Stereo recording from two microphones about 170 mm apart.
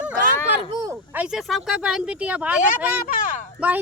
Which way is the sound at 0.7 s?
20° right (ahead or behind).